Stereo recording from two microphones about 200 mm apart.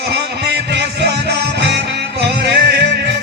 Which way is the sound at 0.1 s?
55° right (ahead or behind).